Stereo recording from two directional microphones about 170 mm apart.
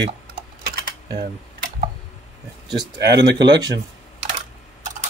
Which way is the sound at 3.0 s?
85° right.